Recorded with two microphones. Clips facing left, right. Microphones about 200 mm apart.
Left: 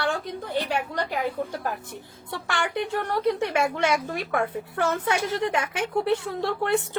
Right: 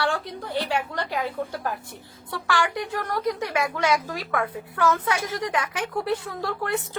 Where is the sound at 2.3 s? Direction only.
25° left (ahead or behind).